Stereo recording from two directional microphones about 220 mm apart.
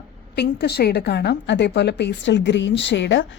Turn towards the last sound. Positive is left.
turn(degrees=55)  # may be behind; listen again after turning